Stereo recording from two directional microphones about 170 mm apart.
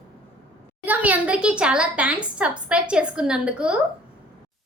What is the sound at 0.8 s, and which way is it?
A woman's voice, 10° right (ahead or behind).